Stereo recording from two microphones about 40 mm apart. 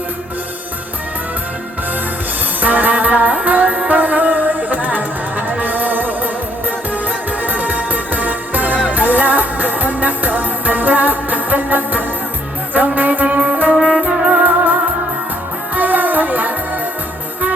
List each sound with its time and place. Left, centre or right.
2.6 s music: right
13.7 s music: centre
14.4 s music: right